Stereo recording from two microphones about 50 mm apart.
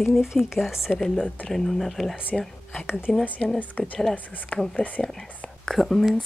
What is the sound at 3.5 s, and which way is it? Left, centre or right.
Speech, left.